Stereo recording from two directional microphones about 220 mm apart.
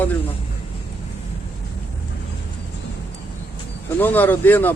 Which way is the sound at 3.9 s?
10° left (ahead or behind).